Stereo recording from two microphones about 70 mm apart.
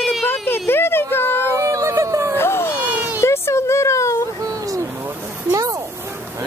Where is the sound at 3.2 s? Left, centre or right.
Left.